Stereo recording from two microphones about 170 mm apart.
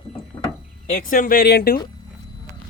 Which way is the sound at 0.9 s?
50° left (ahead or behind).